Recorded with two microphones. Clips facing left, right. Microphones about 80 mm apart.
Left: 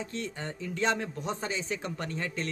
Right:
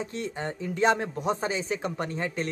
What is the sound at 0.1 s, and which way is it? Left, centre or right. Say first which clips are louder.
Speech: right 4 dB; centre.